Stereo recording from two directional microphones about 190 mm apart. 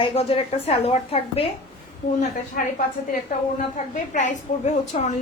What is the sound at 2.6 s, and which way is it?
Speech, 50° left (ahead or behind).